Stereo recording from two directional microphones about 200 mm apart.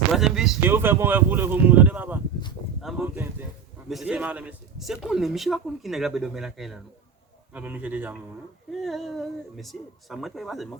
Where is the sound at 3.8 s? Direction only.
5° right (ahead or behind).